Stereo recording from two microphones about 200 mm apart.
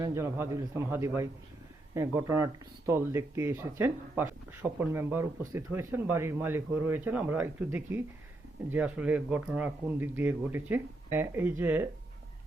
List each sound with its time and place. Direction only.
0.0 s speech: 15° right (ahead or behind)